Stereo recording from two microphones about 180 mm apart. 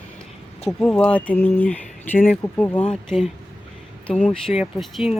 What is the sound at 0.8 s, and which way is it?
Speech, 5° left (ahead or behind).